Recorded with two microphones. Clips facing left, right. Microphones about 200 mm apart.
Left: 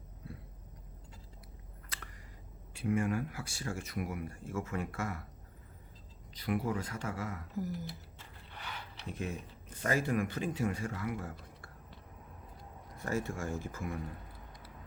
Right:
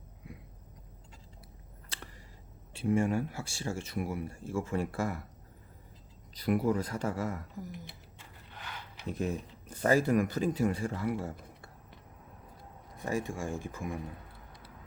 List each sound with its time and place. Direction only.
1.9 s a sound: 30° right (ahead or behind)
2.7 s speech: 25° right (ahead or behind)
6.3 s speech: 40° right (ahead or behind)
9.0 s speech: 40° right (ahead or behind)
13.0 s speech: 15° right (ahead or behind)